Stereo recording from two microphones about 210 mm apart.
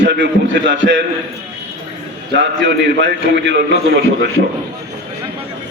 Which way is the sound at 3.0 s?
55° right (ahead or behind).